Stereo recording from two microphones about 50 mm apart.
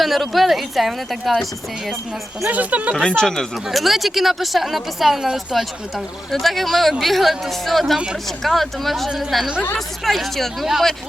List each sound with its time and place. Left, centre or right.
0.0 s speech: centre
2.5 s speech: right
3.0 s speech: centre
3.7 s speech: centre
6.3 s speech: centre